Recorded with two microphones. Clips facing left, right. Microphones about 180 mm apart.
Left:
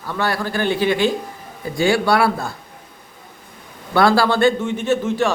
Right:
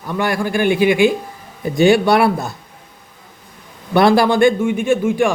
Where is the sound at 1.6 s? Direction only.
20° right (ahead or behind).